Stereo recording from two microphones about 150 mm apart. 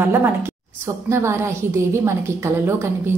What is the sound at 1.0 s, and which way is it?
A woman's voice, 20° right (ahead or behind).